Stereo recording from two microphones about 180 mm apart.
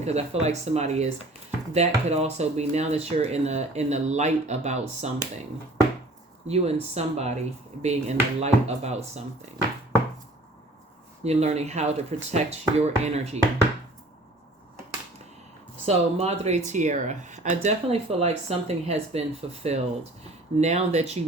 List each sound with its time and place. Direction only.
0.0 s speech: 35° right (ahead or behind)
6.5 s speech: 35° right (ahead or behind)
11.2 s speech: 35° right (ahead or behind)
15.9 s speech: 35° right (ahead or behind)